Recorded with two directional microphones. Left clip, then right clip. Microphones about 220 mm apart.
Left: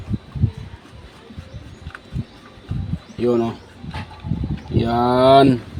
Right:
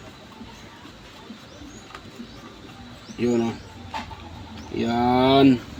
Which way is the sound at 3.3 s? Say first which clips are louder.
Left 5 dB; 30° left (ahead or behind).